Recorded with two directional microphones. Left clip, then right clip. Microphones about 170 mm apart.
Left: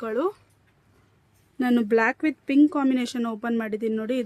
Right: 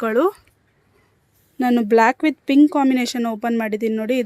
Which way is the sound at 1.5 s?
15° right (ahead or behind).